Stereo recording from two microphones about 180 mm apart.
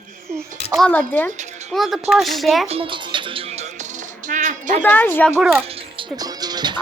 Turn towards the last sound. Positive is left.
turn(degrees=-25)  # may be behind; listen again after turning